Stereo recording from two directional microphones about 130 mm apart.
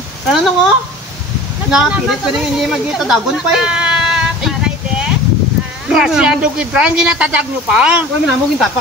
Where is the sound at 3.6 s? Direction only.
5° right (ahead or behind).